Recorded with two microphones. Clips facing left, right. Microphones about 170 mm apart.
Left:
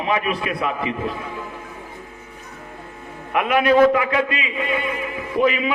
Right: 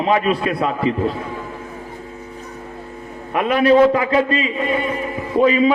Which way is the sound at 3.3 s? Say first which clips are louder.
Right 3 dB; 30° right (ahead or behind).